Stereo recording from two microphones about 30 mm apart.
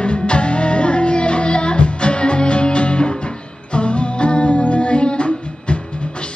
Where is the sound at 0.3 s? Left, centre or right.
Left.